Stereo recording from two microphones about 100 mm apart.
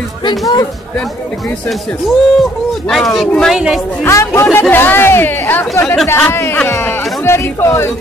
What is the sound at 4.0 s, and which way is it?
Speech, 30° left (ahead or behind).